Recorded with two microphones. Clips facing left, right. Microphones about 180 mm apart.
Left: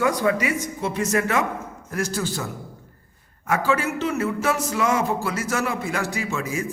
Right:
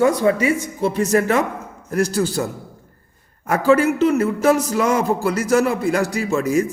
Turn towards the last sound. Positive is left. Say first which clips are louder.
# right 9 dB
turn(degrees=-40)  # may be behind; listen again after turning